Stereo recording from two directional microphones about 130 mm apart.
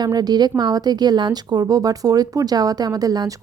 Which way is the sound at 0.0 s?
30° right (ahead or behind).